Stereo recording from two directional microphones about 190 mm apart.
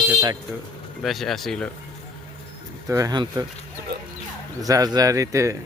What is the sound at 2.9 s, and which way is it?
Speech, 20° right (ahead or behind).